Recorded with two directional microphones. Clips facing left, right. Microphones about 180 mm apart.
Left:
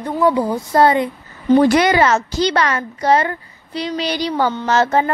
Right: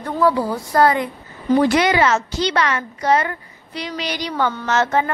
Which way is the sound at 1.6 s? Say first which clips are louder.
Left 1 dB; 45° left (ahead or behind).